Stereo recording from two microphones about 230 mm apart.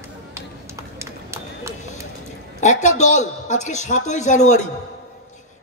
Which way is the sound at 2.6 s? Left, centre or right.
Left.